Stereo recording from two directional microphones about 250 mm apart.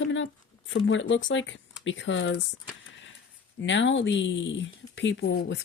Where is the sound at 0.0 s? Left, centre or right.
Left.